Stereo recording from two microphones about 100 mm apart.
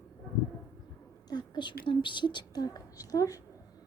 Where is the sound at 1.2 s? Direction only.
45° left (ahead or behind).